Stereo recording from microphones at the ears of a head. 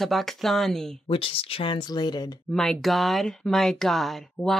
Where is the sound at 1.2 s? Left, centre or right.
Left.